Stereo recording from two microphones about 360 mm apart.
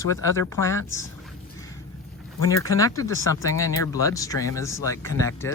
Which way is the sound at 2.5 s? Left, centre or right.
Centre.